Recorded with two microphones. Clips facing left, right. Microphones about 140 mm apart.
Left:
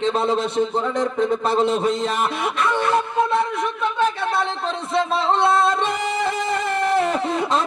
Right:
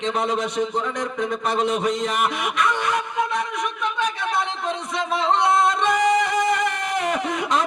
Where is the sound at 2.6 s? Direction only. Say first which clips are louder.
Left 3 dB; 15° right (ahead or behind).